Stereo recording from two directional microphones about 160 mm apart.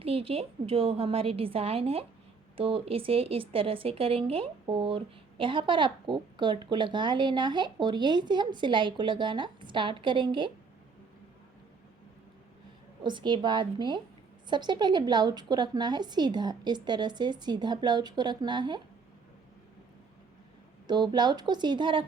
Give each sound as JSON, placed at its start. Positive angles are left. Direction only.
{"t": 0.0, "sound": "a woman's voice", "side_deg": -35}
{"t": 13.0, "sound": "speech", "side_deg": -30}
{"t": 20.8, "sound": "speech", "side_deg": -25}